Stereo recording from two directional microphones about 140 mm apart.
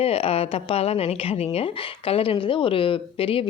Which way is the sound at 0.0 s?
45° left (ahead or behind).